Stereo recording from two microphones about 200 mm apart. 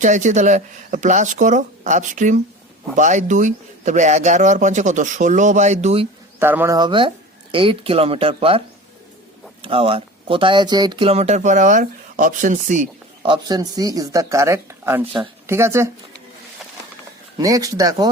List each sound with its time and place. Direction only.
0.0 s speech: 40° right (ahead or behind)
6.4 s speech: 10° right (ahead or behind)
6.7 s speech: 25° right (ahead or behind); by 12.9 s 40° right (ahead or behind)
13.2 s speech: 20° right (ahead or behind)
17.3 s speech: 15° right (ahead or behind)